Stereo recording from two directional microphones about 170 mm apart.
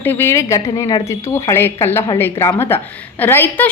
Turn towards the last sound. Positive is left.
turn(degrees=10)  # may be behind; listen again after turning